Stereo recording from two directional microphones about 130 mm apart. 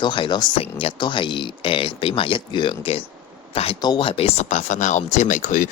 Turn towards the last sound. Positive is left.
turn(degrees=70)  # may be behind; listen again after turning